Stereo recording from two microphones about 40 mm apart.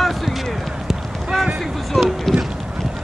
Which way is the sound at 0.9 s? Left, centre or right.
Centre.